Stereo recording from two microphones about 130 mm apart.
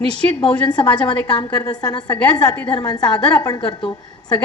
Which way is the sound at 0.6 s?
35° left (ahead or behind).